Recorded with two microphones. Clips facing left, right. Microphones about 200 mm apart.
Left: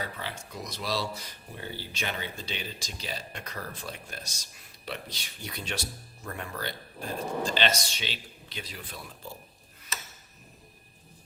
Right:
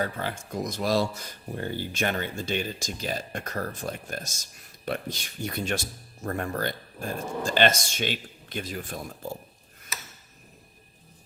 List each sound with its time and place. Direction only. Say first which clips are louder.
0.0 s speech: right 7 dB; 50° right (ahead or behind)